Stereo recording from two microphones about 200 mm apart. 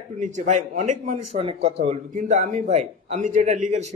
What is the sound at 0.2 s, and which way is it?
A man's voice, 40° right (ahead or behind).